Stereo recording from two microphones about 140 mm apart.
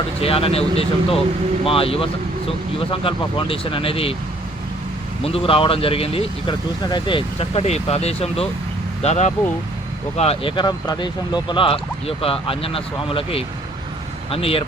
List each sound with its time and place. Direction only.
0.2 s speech: 45° left (ahead or behind)
5.2 s speech: 40° left (ahead or behind)